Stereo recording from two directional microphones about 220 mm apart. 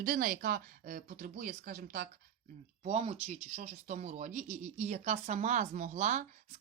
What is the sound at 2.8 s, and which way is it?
Speech, 30° right (ahead or behind).